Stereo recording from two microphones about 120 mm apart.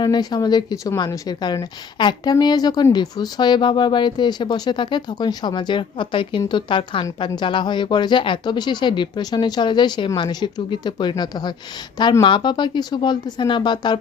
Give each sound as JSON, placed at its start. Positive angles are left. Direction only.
{"t": 0.0, "sound": "a woman's voice", "side_deg": 35}